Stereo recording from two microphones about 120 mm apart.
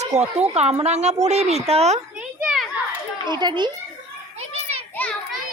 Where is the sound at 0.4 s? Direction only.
65° right (ahead or behind).